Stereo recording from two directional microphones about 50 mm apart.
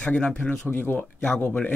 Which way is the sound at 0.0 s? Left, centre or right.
Left.